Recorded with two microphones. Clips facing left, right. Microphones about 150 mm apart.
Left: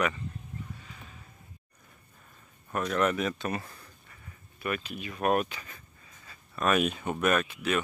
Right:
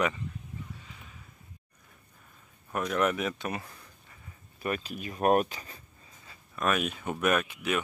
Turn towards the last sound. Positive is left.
turn(degrees=-15)  # may be behind; listen again after turning